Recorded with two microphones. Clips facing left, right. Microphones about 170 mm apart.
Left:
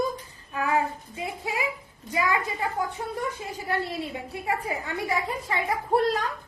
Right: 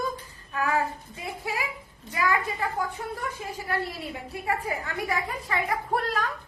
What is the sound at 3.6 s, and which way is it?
A woman's voice, 25° left (ahead or behind).